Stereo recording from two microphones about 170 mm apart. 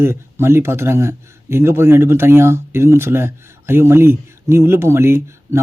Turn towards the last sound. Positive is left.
turn(degrees=-15)  # may be behind; listen again after turning